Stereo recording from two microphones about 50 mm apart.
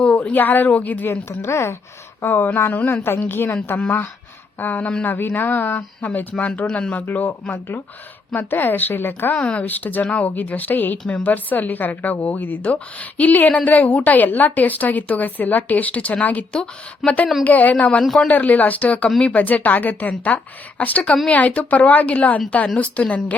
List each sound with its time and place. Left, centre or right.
0.0 s a woman's voice: left
1.1 s a woman's voice: left
2.2 s a woman's voice: left
4.6 s a woman's voice: left
6.3 s a woman's voice: left
8.4 s a woman's voice: left
9.3 s a woman's voice: left
9.6 s a woman's voice: left
17.0 s speech: centre
17.4 s a woman's voice: left
18.0 s speech: centre
18.3 s a woman's voice: left